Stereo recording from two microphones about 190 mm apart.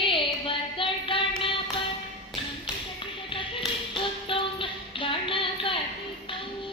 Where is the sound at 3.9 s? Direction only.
25° left (ahead or behind).